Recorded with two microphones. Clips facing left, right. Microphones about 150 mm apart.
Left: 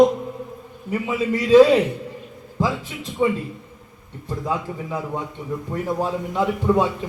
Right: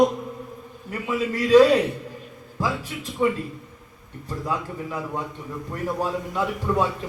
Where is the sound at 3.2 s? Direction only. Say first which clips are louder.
Left 2 dB; 15° left (ahead or behind).